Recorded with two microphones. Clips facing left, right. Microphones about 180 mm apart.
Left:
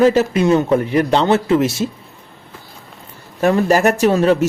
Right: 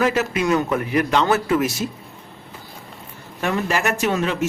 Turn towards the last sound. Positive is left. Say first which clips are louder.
# left 8 dB
turn(degrees=35)  # may be behind; listen again after turning